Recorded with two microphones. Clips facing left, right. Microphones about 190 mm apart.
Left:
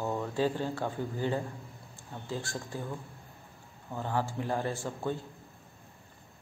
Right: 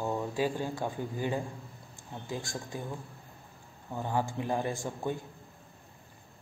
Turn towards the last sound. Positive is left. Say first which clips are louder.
# even
turn(degrees=-15)  # may be behind; listen again after turning